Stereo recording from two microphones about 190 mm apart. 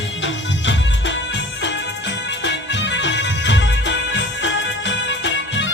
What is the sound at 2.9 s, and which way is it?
Music, 70° left (ahead or behind).